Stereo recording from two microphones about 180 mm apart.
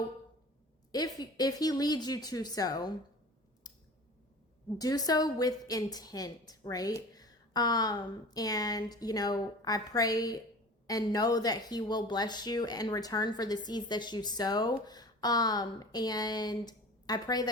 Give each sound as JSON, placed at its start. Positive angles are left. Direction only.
{"t": 0.9, "sound": "speech", "side_deg": 20}
{"t": 3.6, "sound": "a sound", "side_deg": 20}
{"t": 4.8, "sound": "speech", "side_deg": 20}